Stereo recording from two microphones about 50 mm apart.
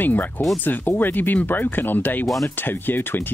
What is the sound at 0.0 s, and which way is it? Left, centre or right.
Speech, left.